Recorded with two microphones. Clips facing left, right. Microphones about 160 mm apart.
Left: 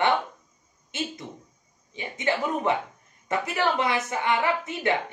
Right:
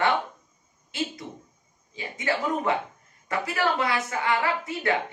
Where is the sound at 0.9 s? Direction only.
20° left (ahead or behind).